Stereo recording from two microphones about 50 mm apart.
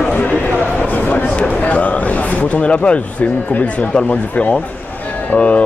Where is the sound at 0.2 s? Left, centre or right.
Left.